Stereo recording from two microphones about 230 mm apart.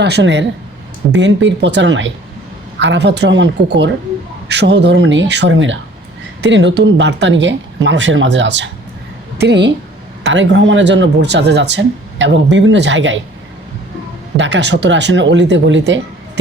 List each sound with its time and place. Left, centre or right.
0.0 s speech: right
14.3 s speech: right